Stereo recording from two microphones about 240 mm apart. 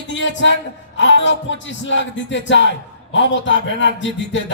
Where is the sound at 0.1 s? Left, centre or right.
Left.